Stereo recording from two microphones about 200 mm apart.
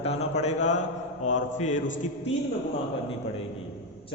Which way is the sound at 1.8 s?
65° left (ahead or behind).